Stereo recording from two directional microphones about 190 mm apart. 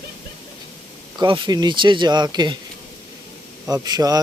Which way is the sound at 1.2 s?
25° right (ahead or behind).